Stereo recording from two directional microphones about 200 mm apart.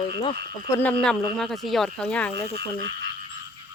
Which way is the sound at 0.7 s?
10° left (ahead or behind).